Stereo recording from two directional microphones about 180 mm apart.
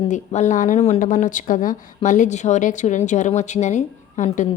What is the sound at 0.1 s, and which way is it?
A woman's voice, 40° left (ahead or behind).